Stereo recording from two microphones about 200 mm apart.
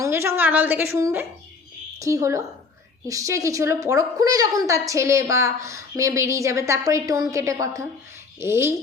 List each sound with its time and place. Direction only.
0.0 s a woman's voice: 15° right (ahead or behind)